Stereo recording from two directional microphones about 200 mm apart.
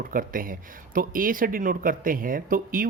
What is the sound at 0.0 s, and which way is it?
Speech, 45° right (ahead or behind).